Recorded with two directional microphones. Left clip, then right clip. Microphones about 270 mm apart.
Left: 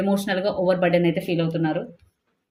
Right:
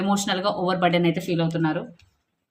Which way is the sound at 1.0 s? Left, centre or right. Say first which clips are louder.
Left 1 dB; centre.